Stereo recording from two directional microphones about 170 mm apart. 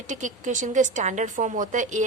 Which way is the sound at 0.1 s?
45° right (ahead or behind).